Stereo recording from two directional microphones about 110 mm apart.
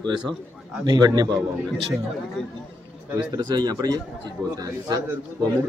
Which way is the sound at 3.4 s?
40° right (ahead or behind).